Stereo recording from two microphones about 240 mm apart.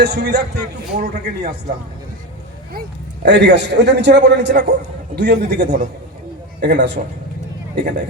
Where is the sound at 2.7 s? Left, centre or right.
Right.